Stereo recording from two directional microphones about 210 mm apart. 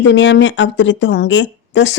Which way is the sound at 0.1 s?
60° left (ahead or behind).